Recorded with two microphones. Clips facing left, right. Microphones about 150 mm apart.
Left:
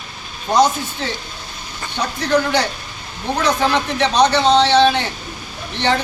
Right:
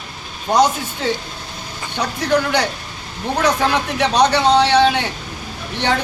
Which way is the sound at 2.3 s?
10° right (ahead or behind).